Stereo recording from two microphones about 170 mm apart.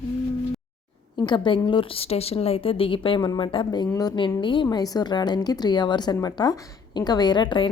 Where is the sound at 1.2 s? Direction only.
25° left (ahead or behind).